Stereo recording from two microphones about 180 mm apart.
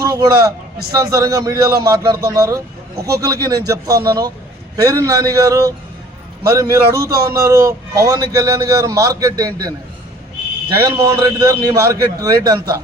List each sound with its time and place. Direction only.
0.0 s a man's voice: 20° right (ahead or behind)
10.8 s a man's voice: 20° right (ahead or behind)